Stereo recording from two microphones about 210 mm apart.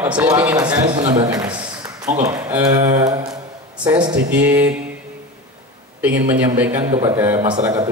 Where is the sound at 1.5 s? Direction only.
5° right (ahead or behind).